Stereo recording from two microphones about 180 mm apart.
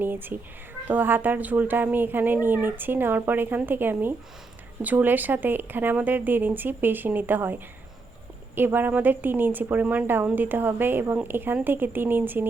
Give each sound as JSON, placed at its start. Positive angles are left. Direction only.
{"t": 0.0, "sound": "speech", "side_deg": -10}